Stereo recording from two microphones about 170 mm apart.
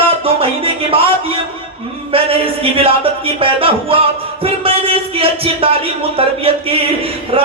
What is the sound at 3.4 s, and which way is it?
Music, 35° right (ahead or behind).